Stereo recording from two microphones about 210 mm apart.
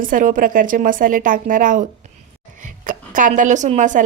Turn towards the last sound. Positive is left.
turn(degrees=-35)  # may be behind; listen again after turning